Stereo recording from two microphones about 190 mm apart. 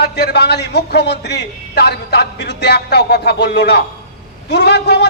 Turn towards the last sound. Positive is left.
turn(degrees=60)  # may be behind; listen again after turning